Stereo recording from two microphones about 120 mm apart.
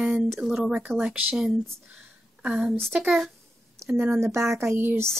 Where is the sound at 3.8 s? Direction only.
20° right (ahead or behind).